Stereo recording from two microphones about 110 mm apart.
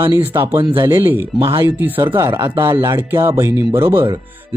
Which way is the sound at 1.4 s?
50° right (ahead or behind).